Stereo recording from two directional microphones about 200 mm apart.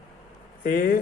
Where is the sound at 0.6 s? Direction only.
45° left (ahead or behind).